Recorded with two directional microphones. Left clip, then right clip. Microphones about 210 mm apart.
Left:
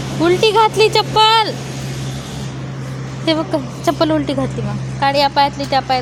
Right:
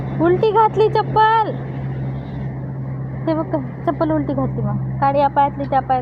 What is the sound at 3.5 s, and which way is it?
A woman's voice, 20° left (ahead or behind).